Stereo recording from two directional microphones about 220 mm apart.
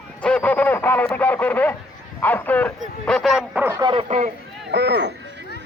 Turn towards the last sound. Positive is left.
turn(degrees=-50)  # may be behind; listen again after turning